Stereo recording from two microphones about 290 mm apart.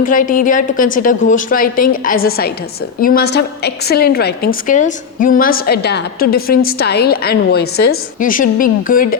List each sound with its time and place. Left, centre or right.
0.0 s a woman's voice: left